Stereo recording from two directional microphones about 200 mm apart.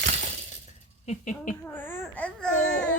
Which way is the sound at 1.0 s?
35° left (ahead or behind).